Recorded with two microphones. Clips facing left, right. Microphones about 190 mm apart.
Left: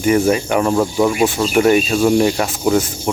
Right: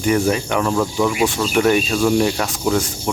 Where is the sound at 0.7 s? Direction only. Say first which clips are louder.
Left 3 dB; 15° left (ahead or behind).